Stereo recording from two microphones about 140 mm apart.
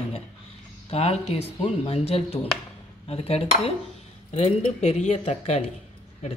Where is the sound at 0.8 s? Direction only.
45° left (ahead or behind).